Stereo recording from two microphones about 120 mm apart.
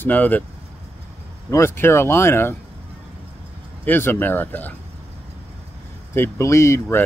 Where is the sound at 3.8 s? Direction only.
15° left (ahead or behind).